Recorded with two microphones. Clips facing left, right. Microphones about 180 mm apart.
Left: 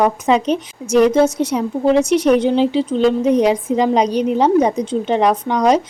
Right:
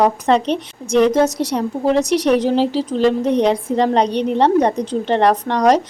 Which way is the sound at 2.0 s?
35° right (ahead or behind).